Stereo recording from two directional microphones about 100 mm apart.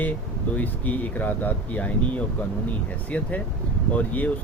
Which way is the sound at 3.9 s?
15° left (ahead or behind).